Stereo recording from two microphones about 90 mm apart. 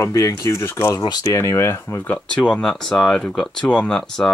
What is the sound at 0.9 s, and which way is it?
Speech, 45° left (ahead or behind).